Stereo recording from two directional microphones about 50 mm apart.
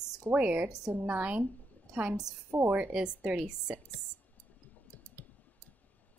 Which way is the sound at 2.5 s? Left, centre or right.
Right.